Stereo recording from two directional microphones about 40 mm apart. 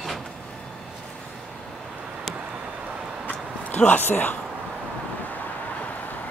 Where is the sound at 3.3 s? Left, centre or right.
Left.